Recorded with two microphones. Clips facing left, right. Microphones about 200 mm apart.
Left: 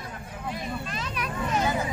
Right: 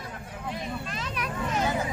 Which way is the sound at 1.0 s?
60° right (ahead or behind).